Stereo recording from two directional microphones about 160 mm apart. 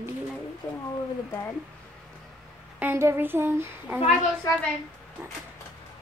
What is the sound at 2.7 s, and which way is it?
A woman's voice, 15° right (ahead or behind).